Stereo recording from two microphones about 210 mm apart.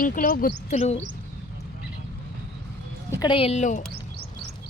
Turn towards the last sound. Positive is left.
turn(degrees=35)  # may be behind; listen again after turning